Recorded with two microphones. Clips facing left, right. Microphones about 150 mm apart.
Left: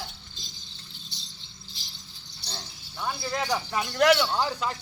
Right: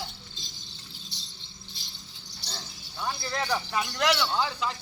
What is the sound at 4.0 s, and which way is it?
Speech, 45° left (ahead or behind).